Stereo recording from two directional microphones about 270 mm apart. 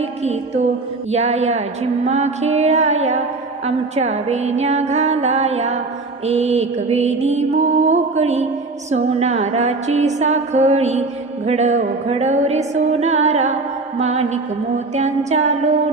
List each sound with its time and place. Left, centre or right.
0.0 s music: right